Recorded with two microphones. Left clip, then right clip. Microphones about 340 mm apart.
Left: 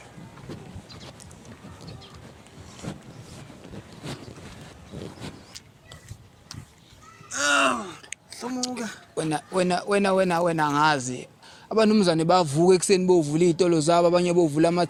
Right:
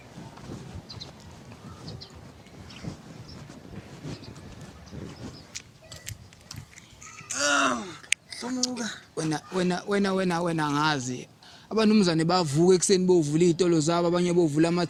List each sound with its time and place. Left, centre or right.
7.3 s speech: centre